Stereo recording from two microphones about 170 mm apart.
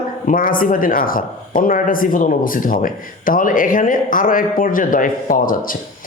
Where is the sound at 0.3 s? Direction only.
55° left (ahead or behind).